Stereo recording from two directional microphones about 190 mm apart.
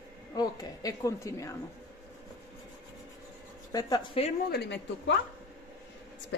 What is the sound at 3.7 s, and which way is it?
Speech, 25° left (ahead or behind).